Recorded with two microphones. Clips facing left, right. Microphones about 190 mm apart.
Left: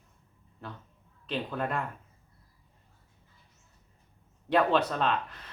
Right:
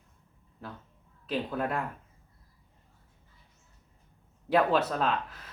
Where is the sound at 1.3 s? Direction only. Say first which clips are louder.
Right 1 dB; 5° right (ahead or behind).